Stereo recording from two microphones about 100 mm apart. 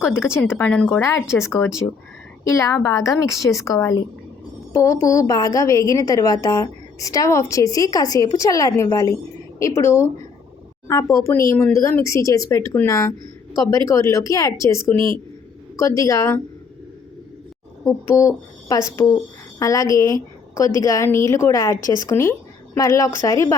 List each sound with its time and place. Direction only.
0.0 s speech: 25° left (ahead or behind)
1.0 s a woman's voice: 30° left (ahead or behind)
17.8 s a woman's voice: 30° left (ahead or behind)
22.1 s speech: 25° left (ahead or behind)